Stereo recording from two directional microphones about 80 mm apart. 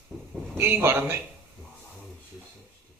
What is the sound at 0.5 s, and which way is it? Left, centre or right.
Speech, right.